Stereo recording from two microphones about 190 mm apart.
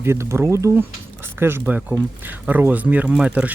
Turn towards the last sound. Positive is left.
turn(degrees=-5)  # may be behind; listen again after turning